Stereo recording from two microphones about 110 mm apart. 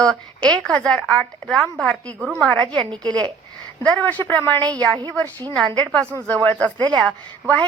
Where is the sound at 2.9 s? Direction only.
40° right (ahead or behind).